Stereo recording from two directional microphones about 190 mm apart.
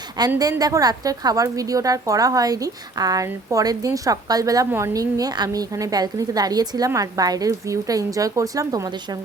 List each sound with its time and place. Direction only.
0.3 s a woman's voice: 15° right (ahead or behind)